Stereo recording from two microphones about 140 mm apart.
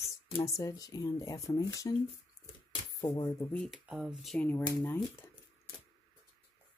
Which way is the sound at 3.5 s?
Centre (ahead or behind).